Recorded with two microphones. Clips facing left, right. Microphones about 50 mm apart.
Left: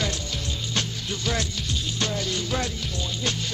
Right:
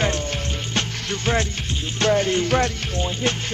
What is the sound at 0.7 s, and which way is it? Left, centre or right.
Music, right.